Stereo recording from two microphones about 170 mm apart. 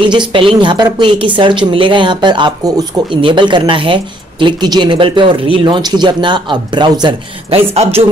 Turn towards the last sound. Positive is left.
turn(degrees=-35)  # may be behind; listen again after turning